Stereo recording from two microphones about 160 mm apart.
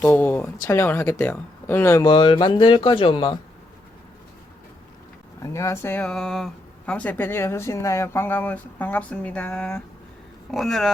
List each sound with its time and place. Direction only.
0.0 s speech: 10° left (ahead or behind)
2.0 s speech: 30° left (ahead or behind)
5.4 s speech: 20° left (ahead or behind); by 10.9 s centre (ahead or behind)